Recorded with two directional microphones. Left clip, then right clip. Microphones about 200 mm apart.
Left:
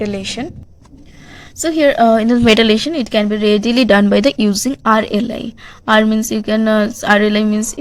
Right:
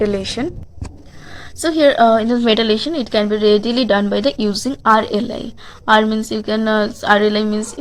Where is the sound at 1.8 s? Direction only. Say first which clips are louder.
Even; 40° left (ahead or behind).